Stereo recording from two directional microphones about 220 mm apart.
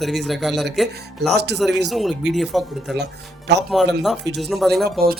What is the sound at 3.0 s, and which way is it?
Speech, 50° right (ahead or behind).